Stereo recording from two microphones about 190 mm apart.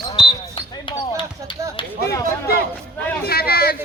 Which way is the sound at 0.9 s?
25° left (ahead or behind).